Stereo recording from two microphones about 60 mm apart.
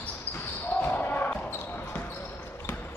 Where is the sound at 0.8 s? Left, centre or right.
Left.